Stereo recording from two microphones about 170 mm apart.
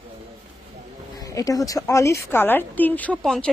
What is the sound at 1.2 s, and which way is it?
Speech, 20° left (ahead or behind).